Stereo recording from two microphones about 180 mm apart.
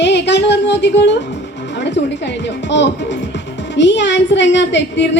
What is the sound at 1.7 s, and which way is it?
A woman's voice, 75° left (ahead or behind).